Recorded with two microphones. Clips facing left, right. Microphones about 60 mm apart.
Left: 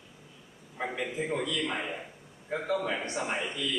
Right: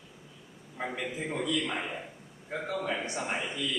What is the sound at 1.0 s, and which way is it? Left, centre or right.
A man's voice, centre.